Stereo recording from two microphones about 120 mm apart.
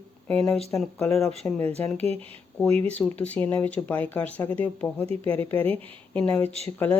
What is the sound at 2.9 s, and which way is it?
Speech, 10° left (ahead or behind).